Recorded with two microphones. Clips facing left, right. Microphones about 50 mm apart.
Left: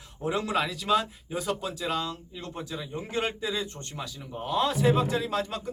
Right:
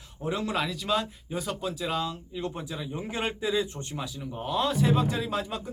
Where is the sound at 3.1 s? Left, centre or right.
Centre.